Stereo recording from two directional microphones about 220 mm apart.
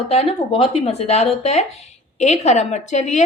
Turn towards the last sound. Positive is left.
turn(degrees=30)  # may be behind; listen again after turning